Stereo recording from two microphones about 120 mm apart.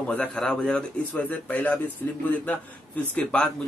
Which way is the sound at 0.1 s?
10° left (ahead or behind).